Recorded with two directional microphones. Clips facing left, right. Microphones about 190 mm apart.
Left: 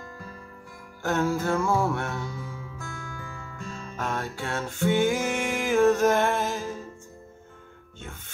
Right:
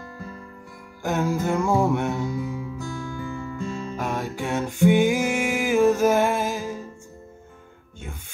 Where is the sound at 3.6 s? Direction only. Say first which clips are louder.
Right 3 dB; 15° right (ahead or behind).